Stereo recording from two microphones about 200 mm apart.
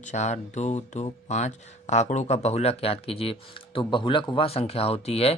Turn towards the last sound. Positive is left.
turn(degrees=30)  # may be behind; listen again after turning